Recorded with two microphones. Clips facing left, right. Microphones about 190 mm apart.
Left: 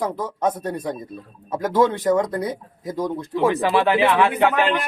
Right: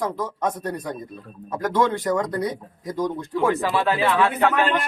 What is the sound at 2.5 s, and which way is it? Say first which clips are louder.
Speech: left 2 dB; 5° left (ahead or behind).